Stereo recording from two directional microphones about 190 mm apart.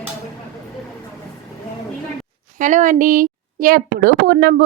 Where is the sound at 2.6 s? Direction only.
40° right (ahead or behind).